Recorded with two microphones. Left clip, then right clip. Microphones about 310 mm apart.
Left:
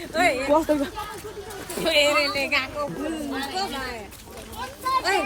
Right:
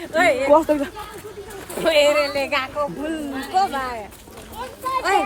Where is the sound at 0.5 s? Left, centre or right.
Centre.